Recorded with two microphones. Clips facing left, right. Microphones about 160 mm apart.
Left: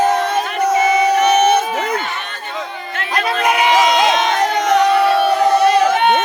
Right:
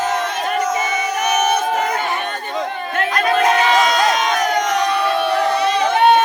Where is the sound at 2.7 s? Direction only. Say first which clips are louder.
Right 5 dB; 50° right (ahead or behind).